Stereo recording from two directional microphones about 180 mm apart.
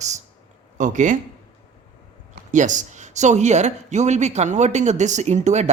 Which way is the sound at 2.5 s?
45° right (ahead or behind).